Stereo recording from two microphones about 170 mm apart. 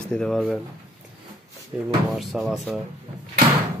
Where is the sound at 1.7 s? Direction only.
10° right (ahead or behind).